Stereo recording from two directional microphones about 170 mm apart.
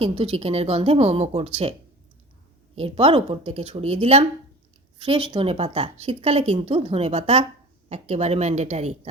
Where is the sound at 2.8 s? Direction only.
35° right (ahead or behind).